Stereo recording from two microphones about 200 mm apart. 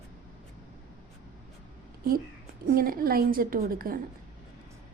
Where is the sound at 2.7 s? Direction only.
45° right (ahead or behind).